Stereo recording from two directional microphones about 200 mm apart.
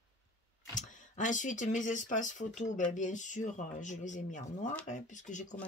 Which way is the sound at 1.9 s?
40° left (ahead or behind).